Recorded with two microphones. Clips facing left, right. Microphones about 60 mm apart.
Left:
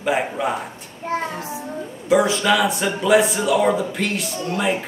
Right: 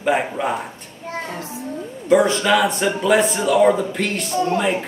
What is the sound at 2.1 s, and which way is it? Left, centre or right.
A man's voice, centre.